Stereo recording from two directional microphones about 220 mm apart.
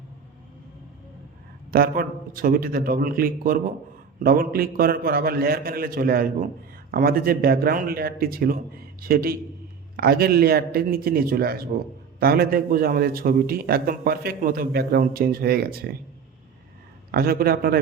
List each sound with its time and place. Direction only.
1.7 s a man's voice: 40° right (ahead or behind)
17.1 s a man's voice: 45° right (ahead or behind)